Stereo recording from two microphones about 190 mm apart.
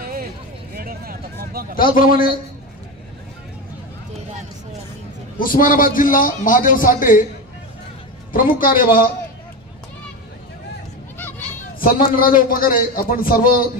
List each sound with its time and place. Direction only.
0.0 s a sound: 50° right (ahead or behind)
1.8 s a man's voice: 45° left (ahead or behind)
5.4 s a man's voice: 50° left (ahead or behind)
8.3 s a man's voice: 50° left (ahead or behind)
11.8 s a man's voice: 50° left (ahead or behind)